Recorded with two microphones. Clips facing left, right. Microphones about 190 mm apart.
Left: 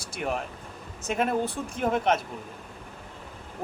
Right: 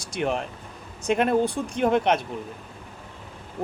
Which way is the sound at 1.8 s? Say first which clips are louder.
Right 4 dB; 75° right (ahead or behind).